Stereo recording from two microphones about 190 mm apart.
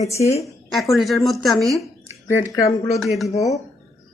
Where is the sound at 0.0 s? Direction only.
35° left (ahead or behind).